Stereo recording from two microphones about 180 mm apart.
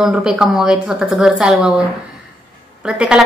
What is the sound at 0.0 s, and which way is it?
A woman's voice, 5° right (ahead or behind).